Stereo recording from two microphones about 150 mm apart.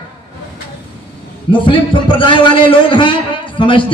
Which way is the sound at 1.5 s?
35° left (ahead or behind).